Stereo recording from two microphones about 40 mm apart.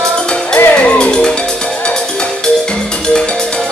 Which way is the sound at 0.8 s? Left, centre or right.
Left.